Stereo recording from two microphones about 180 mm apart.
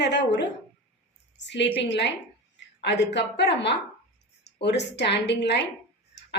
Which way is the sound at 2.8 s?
70° left (ahead or behind).